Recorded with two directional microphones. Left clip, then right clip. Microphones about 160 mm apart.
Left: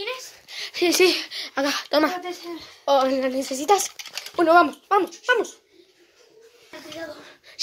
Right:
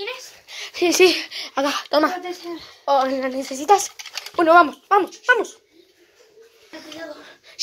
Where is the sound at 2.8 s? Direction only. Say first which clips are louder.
Right 1 dB; 30° left (ahead or behind).